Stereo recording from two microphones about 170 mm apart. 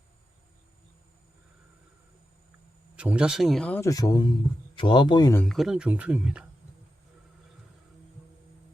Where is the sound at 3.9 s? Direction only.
20° left (ahead or behind).